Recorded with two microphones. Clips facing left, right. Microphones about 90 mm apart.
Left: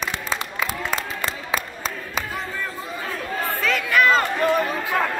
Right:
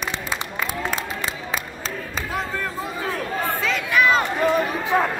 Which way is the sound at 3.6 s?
5° right (ahead or behind).